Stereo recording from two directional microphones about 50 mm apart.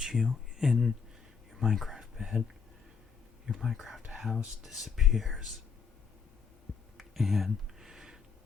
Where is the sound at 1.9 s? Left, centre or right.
Centre.